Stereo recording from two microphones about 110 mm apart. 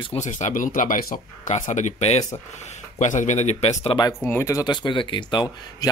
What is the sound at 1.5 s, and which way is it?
Speech, 90° left.